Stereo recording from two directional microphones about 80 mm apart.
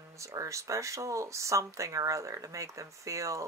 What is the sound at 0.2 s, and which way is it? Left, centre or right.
Speech, right.